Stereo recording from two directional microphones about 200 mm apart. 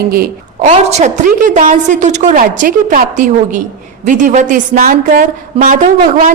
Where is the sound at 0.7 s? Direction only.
35° right (ahead or behind).